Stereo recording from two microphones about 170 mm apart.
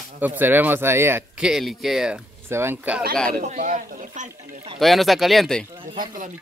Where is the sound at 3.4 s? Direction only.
50° right (ahead or behind).